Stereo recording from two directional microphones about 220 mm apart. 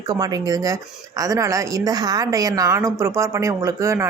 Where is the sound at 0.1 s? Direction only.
15° right (ahead or behind).